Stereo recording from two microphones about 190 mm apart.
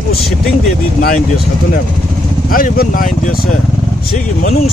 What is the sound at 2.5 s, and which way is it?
Speech, 50° left (ahead or behind).